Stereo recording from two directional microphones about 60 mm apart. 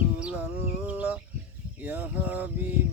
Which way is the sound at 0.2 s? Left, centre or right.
Right.